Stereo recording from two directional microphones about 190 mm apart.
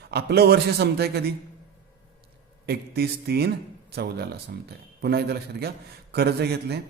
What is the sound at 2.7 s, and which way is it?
A man's voice, 55° right (ahead or behind).